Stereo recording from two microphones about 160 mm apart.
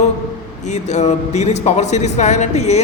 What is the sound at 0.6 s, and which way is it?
A man's voice, 45° left (ahead or behind).